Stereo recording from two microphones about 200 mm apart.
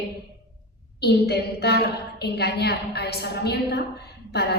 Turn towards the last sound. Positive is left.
turn(degrees=55)  # may be behind; listen again after turning